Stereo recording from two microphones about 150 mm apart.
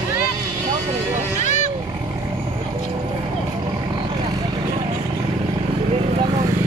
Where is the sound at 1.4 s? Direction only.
55° left (ahead or behind).